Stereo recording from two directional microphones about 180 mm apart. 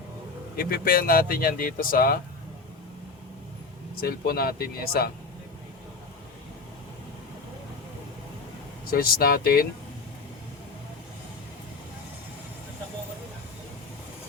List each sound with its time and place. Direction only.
0.5 s speech: 55° left (ahead or behind)
4.0 s speech: 55° left (ahead or behind)
8.9 s speech: 55° left (ahead or behind)